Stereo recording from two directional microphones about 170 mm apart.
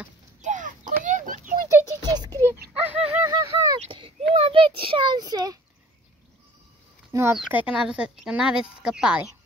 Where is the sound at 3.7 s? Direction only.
30° right (ahead or behind).